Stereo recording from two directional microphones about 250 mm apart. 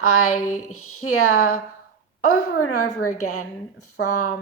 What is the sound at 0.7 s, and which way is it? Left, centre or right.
Speech, left.